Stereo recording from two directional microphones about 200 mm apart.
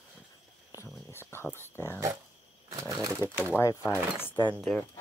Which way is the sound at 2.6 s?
15° right (ahead or behind).